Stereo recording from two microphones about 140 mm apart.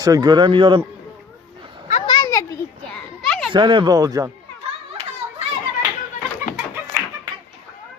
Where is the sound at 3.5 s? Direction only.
35° right (ahead or behind).